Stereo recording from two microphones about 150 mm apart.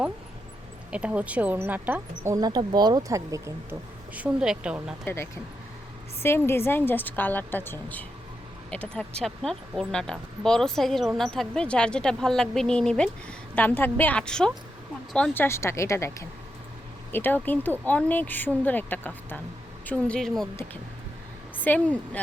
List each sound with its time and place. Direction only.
0.9 s speech: 10° right (ahead or behind)
2.3 s speech: 25° right (ahead or behind); by 4.9 s 5° right (ahead or behind)
5.0 s a woman's voice: 15° left (ahead or behind)
15.4 s a woman's voice: 20° left (ahead or behind)
21.6 s a woman's voice: 10° left (ahead or behind)